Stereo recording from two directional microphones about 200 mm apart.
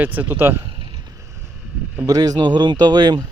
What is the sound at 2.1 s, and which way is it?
Speech, 20° right (ahead or behind).